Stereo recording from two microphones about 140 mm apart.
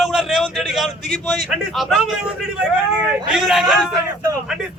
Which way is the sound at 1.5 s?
Centre (ahead or behind).